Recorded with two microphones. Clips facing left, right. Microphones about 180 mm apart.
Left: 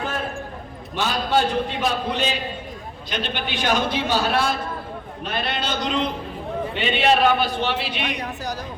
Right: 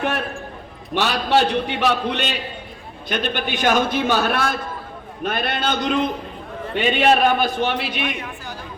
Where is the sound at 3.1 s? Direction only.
50° right (ahead or behind).